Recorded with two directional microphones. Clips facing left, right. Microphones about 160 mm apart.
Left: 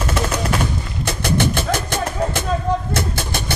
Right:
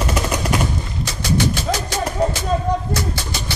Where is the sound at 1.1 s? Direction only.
55° left (ahead or behind).